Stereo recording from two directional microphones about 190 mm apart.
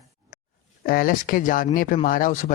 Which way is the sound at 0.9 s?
50° left (ahead or behind).